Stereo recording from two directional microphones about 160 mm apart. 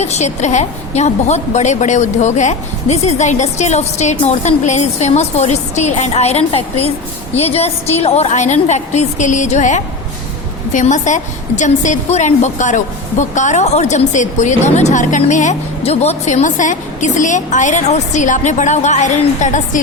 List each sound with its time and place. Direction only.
0.0 s a woman's voice: 45° left (ahead or behind)